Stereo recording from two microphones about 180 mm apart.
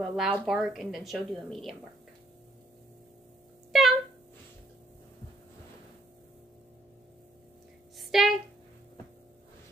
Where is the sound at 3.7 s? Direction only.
Centre (ahead or behind).